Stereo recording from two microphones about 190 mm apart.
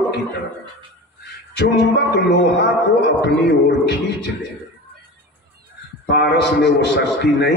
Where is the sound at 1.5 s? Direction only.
65° left (ahead or behind).